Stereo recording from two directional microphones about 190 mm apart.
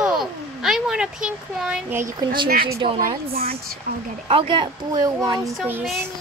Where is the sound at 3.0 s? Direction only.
50° right (ahead or behind).